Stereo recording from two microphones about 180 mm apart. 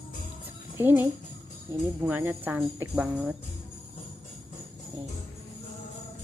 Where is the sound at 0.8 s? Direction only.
10° right (ahead or behind).